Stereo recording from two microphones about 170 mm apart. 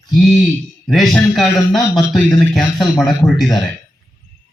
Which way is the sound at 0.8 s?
Centre (ahead or behind).